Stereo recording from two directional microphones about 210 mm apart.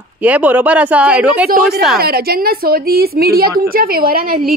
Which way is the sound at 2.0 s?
45° right (ahead or behind).